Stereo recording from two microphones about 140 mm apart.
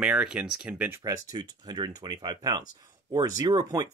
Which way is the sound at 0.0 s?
5° right (ahead or behind).